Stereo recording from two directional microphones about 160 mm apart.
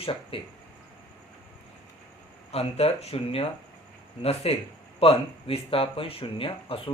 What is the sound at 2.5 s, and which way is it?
Speech, 40° left (ahead or behind).